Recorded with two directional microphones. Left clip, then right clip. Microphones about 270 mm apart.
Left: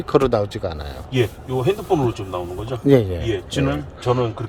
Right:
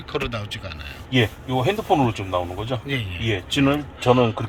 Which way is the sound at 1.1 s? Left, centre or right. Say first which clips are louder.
Even; right.